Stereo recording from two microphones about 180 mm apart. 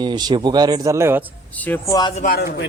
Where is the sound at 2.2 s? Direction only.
50° left (ahead or behind).